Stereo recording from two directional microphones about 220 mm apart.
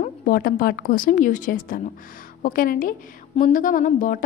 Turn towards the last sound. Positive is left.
turn(degrees=35)  # may be behind; listen again after turning